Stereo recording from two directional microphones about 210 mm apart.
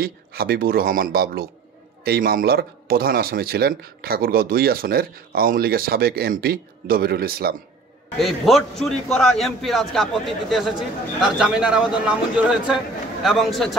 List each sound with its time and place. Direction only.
0.0 s a man's voice: 45° right (ahead or behind)
8.2 s speech: centre (ahead or behind)